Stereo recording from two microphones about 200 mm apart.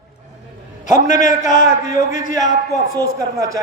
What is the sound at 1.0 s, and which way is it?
Speech, 40° left (ahead or behind).